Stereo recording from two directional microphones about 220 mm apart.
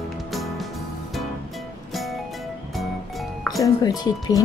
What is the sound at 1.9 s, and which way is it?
Music, centre (ahead or behind).